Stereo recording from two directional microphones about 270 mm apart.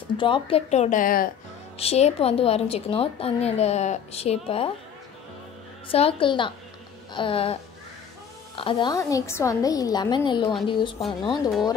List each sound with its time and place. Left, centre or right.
0.2 s a woman's voice: centre
5.9 s a woman's voice: left
8.5 s a woman's voice: centre